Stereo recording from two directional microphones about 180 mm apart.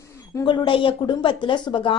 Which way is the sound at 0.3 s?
25° left (ahead or behind).